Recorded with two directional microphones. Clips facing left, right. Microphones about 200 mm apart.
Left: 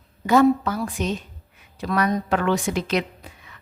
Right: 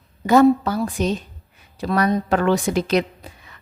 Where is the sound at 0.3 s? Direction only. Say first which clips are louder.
Right 3 dB; 35° right (ahead or behind).